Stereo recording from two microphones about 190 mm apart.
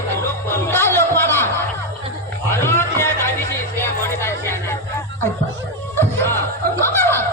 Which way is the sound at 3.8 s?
15° left (ahead or behind).